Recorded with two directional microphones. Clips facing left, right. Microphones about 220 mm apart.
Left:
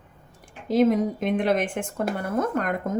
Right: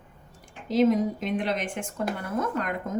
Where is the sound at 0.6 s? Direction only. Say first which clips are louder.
Left 2 dB; 55° left (ahead or behind).